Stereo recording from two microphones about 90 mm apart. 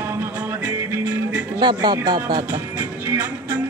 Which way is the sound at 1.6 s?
55° right (ahead or behind).